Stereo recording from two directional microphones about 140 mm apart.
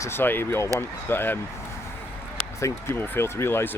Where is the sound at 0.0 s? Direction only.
15° left (ahead or behind).